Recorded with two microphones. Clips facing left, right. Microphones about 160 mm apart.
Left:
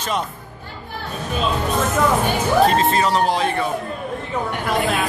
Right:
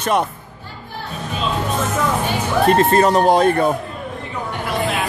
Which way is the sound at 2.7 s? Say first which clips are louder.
Right 4 dB; 50° right (ahead or behind).